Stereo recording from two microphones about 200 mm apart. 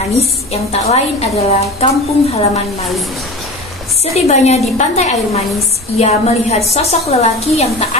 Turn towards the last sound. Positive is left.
turn(degrees=30)  # may be behind; listen again after turning